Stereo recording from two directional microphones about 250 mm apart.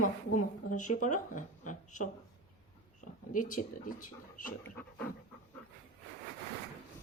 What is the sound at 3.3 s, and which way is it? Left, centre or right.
Speech, left.